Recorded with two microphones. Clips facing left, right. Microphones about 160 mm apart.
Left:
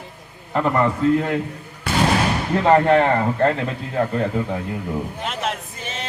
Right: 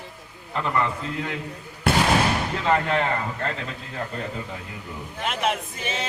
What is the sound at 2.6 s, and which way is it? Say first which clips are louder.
Speech: left 8 dB; 50° left (ahead or behind).